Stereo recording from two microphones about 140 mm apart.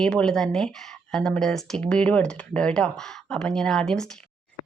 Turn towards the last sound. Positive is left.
turn(degrees=5)  # may be behind; listen again after turning